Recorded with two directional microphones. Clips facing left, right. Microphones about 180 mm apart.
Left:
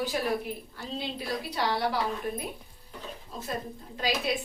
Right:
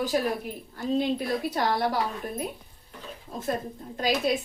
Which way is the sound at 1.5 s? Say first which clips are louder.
Even; 45° right (ahead or behind).